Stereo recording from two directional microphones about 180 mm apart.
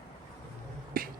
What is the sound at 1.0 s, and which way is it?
Beatboxing, 55° right (ahead or behind).